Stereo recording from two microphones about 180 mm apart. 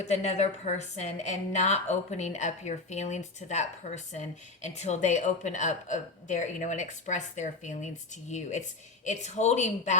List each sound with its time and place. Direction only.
0.0 s a woman's voice: 40° left (ahead or behind)